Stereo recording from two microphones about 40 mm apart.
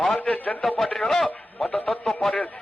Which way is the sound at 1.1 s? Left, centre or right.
Centre.